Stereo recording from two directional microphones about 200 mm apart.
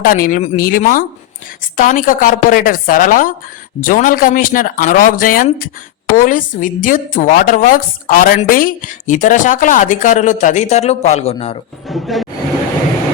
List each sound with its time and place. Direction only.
0.0 s a woman's voice: 45° left (ahead or behind)
11.9 s speech: centre (ahead or behind)